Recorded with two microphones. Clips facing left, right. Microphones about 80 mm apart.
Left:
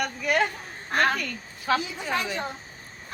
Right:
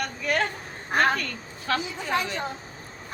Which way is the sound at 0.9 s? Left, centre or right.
Centre.